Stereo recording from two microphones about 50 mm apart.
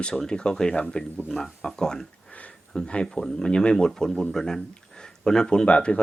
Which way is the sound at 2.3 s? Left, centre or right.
Left.